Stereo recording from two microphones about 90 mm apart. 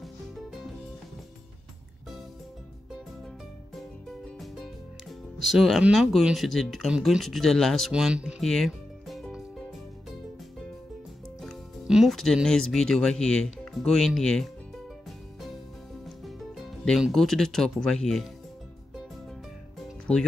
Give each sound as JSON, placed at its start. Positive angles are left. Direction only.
{"t": 0.0, "sound": "music", "side_deg": 0}
{"t": 5.4, "sound": "speech", "side_deg": 0}
{"t": 7.9, "sound": "speech", "side_deg": -10}
{"t": 8.4, "sound": "music", "side_deg": 5}
{"t": 11.4, "sound": "music", "side_deg": 0}
{"t": 12.4, "sound": "speech", "side_deg": 5}
{"t": 16.3, "sound": "music", "side_deg": 0}
{"t": 17.1, "sound": "speech", "side_deg": 5}